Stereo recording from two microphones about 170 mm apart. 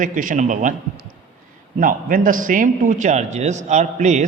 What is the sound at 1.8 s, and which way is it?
A man's voice, 55° right (ahead or behind).